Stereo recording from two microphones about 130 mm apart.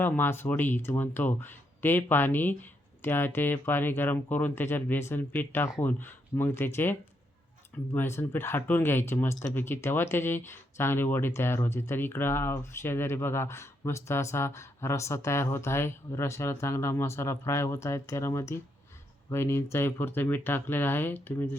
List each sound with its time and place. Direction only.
0.0 s speech: 15° left (ahead or behind)
7.9 s speech: 20° left (ahead or behind)